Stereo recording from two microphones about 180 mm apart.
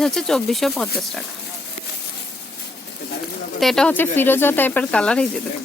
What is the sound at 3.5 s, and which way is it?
Speech, centre (ahead or behind).